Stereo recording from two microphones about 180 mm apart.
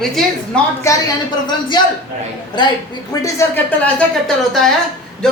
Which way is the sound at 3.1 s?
15° left (ahead or behind).